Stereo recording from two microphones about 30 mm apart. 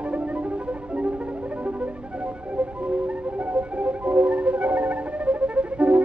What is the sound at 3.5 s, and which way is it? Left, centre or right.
Music, right.